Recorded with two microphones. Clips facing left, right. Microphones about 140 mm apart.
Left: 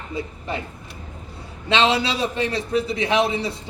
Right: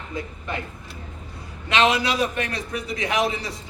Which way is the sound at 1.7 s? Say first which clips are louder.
Left 1 dB; 30° left (ahead or behind).